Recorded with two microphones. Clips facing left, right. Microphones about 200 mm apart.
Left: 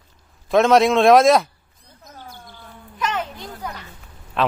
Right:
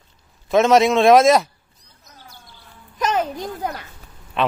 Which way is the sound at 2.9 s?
40° right (ahead or behind).